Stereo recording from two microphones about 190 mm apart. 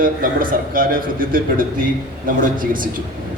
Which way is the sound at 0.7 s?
50° right (ahead or behind).